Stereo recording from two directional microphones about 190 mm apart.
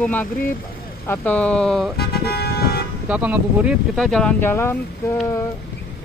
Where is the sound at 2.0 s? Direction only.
55° left (ahead or behind).